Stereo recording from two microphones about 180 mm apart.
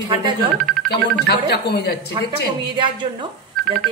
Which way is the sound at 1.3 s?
65° left (ahead or behind).